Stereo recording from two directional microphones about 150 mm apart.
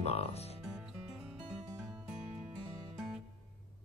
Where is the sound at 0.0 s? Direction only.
45° left (ahead or behind).